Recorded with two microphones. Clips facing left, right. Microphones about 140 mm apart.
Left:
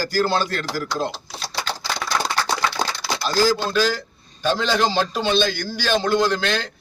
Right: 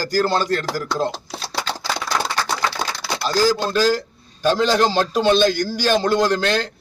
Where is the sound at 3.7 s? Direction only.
10° right (ahead or behind).